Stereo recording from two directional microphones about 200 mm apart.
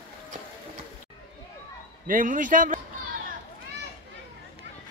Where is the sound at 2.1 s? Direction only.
40° right (ahead or behind).